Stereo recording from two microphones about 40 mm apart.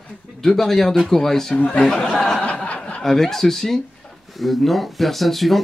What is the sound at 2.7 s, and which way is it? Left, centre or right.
Snicker, left.